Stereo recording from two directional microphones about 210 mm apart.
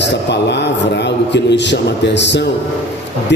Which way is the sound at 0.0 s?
55° left (ahead or behind).